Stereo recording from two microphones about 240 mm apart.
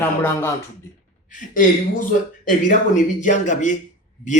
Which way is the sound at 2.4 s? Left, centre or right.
Left.